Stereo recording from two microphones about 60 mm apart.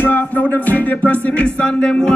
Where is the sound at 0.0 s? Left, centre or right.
Left.